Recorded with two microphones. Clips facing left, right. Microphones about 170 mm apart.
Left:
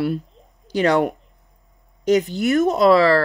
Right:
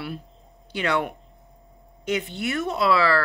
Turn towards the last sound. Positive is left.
turn(degrees=40)  # may be behind; listen again after turning